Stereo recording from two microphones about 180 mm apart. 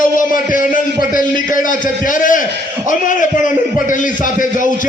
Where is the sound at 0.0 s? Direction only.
50° left (ahead or behind).